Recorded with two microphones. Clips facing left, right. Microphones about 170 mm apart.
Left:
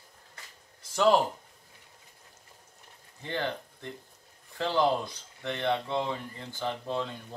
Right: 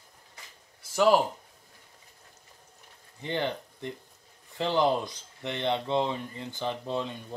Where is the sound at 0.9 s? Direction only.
10° right (ahead or behind).